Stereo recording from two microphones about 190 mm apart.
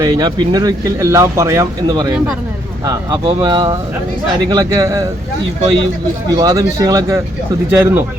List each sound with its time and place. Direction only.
0.0 s speech: 20° right (ahead or behind)
6.3 s speech: 15° right (ahead or behind)